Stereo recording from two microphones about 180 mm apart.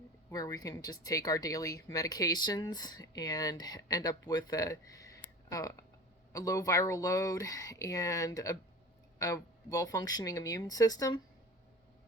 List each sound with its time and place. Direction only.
0.3 s speech: 20° left (ahead or behind)